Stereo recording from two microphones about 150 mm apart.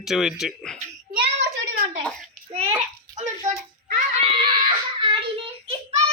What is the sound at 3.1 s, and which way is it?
Hands, 55° right (ahead or behind).